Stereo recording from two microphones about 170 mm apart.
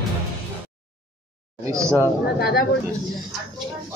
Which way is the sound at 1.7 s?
15° right (ahead or behind).